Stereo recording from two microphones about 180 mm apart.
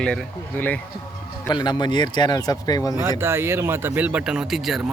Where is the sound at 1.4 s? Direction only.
25° left (ahead or behind).